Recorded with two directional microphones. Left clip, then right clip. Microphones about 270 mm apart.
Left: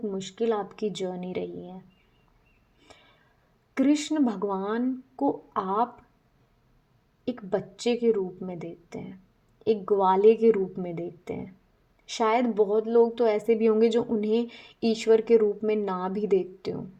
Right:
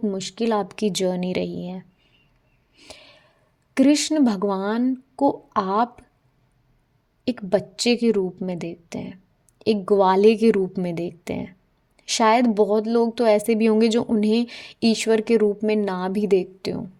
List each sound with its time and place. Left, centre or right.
0.0 s a woman's voice: right
3.8 s a woman's voice: right
7.3 s a woman's voice: right